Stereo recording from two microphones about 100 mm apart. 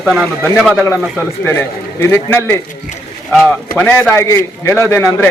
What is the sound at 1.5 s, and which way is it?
Speech, 20° left (ahead or behind).